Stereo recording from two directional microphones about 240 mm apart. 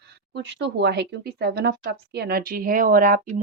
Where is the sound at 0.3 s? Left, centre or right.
Right.